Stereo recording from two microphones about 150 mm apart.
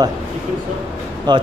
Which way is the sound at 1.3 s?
30° right (ahead or behind).